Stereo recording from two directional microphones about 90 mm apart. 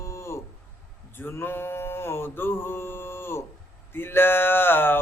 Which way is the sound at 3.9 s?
25° left (ahead or behind).